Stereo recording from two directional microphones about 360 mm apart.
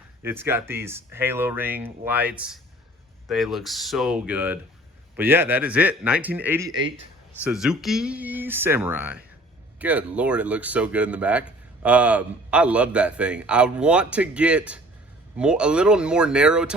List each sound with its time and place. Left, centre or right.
0.2 s speech: centre
6.7 s speech: right
7.4 s speech: centre